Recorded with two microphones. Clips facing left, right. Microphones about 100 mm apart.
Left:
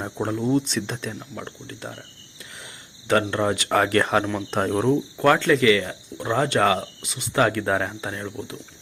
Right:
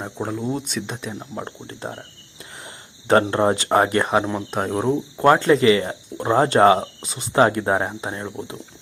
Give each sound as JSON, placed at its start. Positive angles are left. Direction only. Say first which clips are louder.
{"t": 0.0, "sound": "speech", "louder": "left 1 dB", "side_deg": -5}
{"t": 1.1, "sound": "speech", "louder": "right 4 dB", "side_deg": -35}
{"t": 3.1, "sound": "speech", "louder": "right 4 dB", "side_deg": -35}
{"t": 4.5, "sound": "speech", "louder": "left 1 dB", "side_deg": -5}
{"t": 5.1, "sound": "speech", "louder": "right 5 dB", "side_deg": -25}